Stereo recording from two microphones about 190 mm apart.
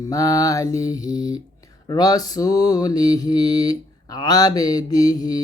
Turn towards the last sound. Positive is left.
turn(degrees=20)  # may be behind; listen again after turning